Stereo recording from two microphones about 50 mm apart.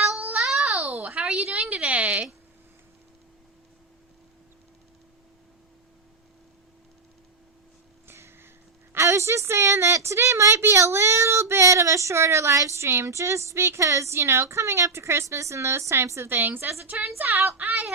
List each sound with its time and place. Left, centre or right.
0.3 s babbling: centre
1.0 s a sound: right
8.0 s a sound: right
9.0 s a woman's voice: right
10.6 s a woman's voice: right
13.1 s a woman's voice: right
16.3 s a woman's voice: right
17.2 s speech: right